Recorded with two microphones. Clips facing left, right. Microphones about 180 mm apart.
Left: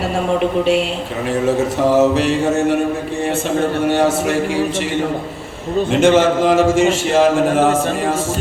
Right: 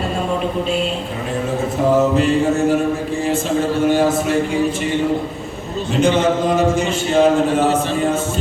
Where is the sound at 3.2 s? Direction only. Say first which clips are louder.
Left 2 dB; 65° left (ahead or behind); by 4.9 s 90° left.